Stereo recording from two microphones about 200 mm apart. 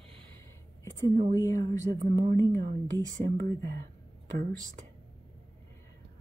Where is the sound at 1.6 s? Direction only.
35° right (ahead or behind).